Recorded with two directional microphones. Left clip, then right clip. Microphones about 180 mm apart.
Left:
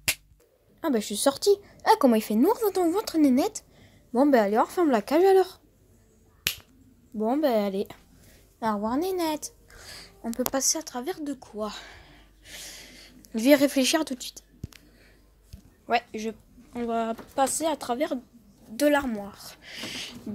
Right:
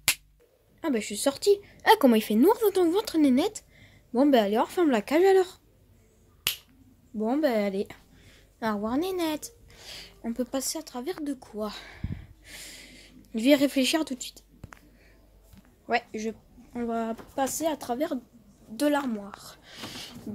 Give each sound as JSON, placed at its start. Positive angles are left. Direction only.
{"t": 0.7, "sound": "a woman's voice", "side_deg": 10}
{"t": 1.8, "sound": "a sound", "side_deg": -10}
{"t": 2.1, "sound": "a woman's voice", "side_deg": -10}
{"t": 6.5, "sound": "finger snapping", "side_deg": 10}
{"t": 7.2, "sound": "a woman's voice", "side_deg": 0}
{"t": 10.6, "sound": "a sound", "side_deg": 5}
{"t": 13.3, "sound": "a woman's voice", "side_deg": 0}
{"t": 15.9, "sound": "a woman's voice", "side_deg": -5}